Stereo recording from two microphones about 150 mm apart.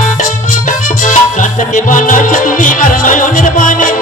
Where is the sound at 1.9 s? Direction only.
60° left (ahead or behind).